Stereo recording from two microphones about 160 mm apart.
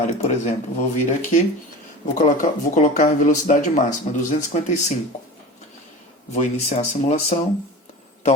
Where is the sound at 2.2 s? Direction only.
55° left (ahead or behind).